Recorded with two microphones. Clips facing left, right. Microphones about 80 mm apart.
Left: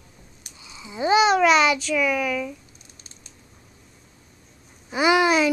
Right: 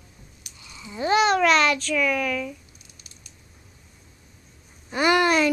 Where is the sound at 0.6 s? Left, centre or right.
Centre.